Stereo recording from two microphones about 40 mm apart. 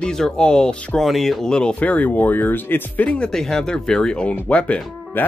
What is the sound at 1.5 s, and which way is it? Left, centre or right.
Speech, left.